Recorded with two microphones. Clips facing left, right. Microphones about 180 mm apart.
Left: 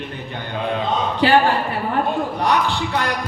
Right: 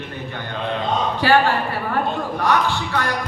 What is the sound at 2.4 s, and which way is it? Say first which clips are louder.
Speech: right 1 dB; 15° left (ahead or behind).